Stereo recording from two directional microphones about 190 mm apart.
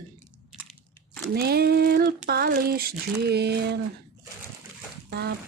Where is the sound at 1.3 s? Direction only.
55° right (ahead or behind).